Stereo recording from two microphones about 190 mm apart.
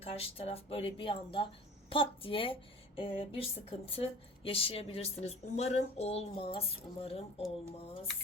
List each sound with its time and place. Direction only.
0.0 s a woman's voice: 30° left (ahead or behind)